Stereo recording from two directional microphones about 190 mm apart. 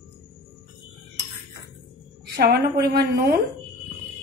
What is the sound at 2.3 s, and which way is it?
A woman's voice, 55° right (ahead or behind).